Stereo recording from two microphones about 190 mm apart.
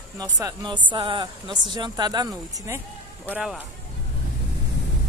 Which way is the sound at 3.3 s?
5° right (ahead or behind).